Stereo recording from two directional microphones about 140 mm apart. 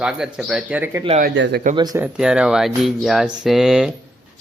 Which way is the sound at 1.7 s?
30° right (ahead or behind).